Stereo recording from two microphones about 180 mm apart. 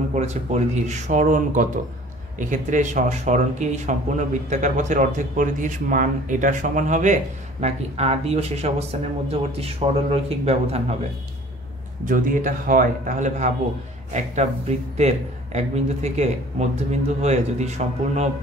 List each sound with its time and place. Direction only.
0.1 s a man's voice: 40° right (ahead or behind)
12.0 s a man's voice: 50° right (ahead or behind)